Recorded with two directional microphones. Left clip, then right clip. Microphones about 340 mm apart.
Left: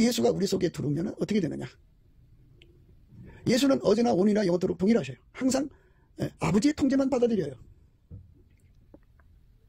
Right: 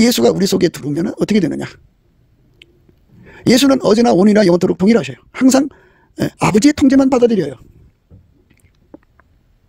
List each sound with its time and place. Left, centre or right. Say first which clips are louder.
0.0 s a man's voice: right 13 dB; right
2.6 s a sound: right 14 dB; right
3.3 s a man's voice: right 13 dB; right
8.5 s chewing: right 18 dB; right